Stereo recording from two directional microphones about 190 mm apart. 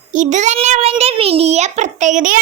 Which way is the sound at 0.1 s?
40° right (ahead or behind).